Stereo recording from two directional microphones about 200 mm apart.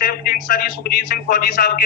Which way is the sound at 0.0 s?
45° left (ahead or behind).